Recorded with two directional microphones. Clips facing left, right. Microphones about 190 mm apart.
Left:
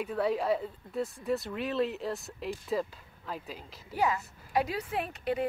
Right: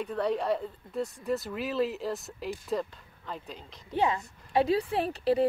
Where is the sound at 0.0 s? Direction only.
5° left (ahead or behind).